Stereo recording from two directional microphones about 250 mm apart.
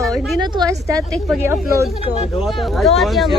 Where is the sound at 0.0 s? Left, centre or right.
Centre.